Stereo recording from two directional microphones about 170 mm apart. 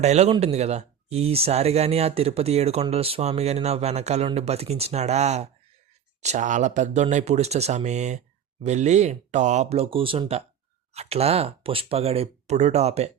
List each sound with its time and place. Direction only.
0.0 s speech: 40° right (ahead or behind)